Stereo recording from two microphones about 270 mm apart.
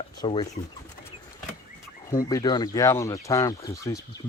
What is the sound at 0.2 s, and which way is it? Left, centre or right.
Speech, centre.